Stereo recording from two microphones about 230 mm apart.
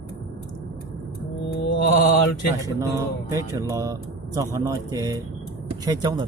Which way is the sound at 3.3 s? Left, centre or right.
Centre.